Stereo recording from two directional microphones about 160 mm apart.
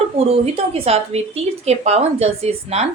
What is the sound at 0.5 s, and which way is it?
A woman's voice, 40° right (ahead or behind).